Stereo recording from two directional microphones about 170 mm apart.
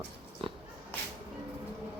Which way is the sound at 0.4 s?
30° right (ahead or behind).